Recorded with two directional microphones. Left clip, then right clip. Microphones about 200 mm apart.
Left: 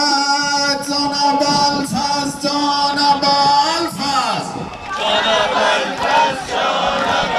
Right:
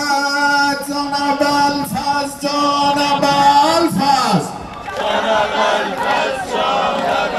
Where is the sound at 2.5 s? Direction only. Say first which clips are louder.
Right 2 dB; 10° right (ahead or behind).